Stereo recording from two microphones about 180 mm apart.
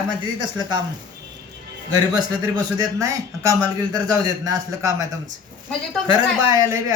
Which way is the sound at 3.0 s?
20° right (ahead or behind).